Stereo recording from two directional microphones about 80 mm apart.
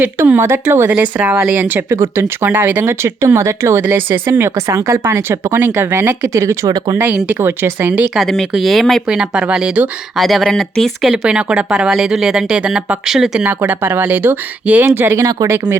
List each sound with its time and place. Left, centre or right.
0.0 s speech: right
0.9 s speech: centre; by 3.8 s right
3.8 s speech: right
6.7 s speech: right
7.3 s speech: right
8.1 s speech: centre
9.0 s speech: centre
10.2 s speech: centre
11.1 s speech: centre
11.9 s speech: centre
13.4 s speech: right